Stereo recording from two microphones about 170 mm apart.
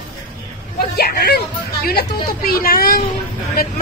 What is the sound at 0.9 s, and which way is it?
A man's voice, 70° left (ahead or behind).